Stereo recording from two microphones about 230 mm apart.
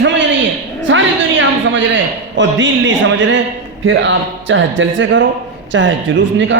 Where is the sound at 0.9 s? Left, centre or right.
Right.